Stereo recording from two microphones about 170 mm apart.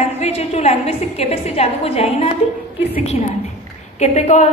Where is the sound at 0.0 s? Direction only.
40° left (ahead or behind).